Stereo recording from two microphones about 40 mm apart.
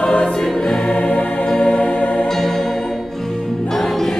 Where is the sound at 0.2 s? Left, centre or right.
Centre; by 2.2 s left.